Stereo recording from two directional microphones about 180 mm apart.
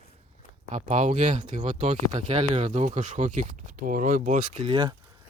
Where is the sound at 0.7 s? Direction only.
40° right (ahead or behind).